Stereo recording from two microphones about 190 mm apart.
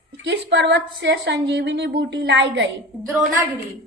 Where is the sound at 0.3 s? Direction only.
65° right (ahead or behind).